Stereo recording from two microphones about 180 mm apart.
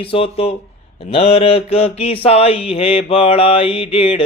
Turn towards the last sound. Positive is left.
turn(degrees=35)  # may be behind; listen again after turning